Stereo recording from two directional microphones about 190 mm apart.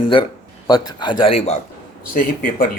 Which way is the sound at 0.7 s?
20° left (ahead or behind).